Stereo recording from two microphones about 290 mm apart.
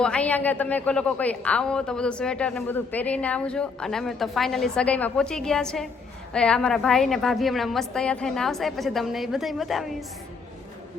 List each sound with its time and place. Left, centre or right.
0.0 s a woman's voice: centre